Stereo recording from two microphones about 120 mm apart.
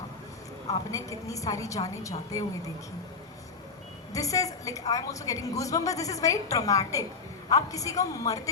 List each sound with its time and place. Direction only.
0.7 s a woman's voice: 30° left (ahead or behind)
4.1 s a woman's voice: 30° left (ahead or behind)